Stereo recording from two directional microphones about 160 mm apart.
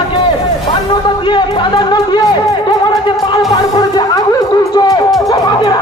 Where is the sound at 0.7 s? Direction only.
30° left (ahead or behind).